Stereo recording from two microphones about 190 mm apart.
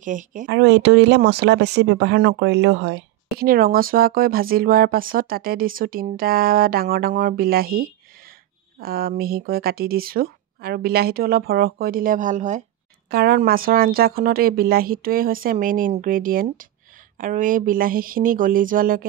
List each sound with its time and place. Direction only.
0.0 s speech: 45° right (ahead or behind)
0.5 s speech: 65° right (ahead or behind); by 12.6 s 40° right (ahead or behind)
13.1 s speech: 50° right (ahead or behind)